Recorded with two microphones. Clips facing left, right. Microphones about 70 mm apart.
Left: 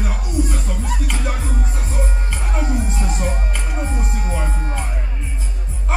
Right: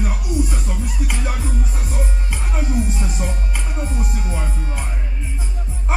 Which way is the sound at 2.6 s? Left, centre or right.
Left.